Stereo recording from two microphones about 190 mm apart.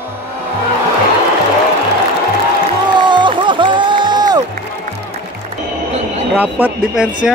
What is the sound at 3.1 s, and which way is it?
Music, 25° right (ahead or behind).